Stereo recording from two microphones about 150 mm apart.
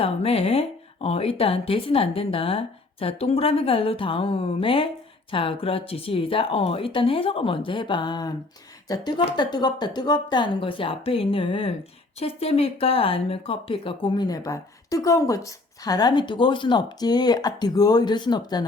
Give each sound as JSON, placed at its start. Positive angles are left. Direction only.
{"t": 0.0, "sound": "a woman's voice", "side_deg": 40}